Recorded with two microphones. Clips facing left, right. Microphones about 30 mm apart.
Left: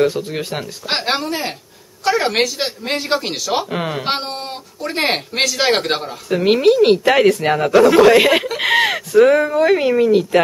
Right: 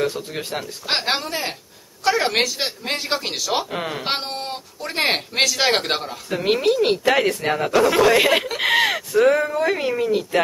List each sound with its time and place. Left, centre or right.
0.0 s speech: centre